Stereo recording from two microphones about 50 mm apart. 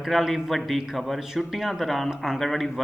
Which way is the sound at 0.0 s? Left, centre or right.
Centre.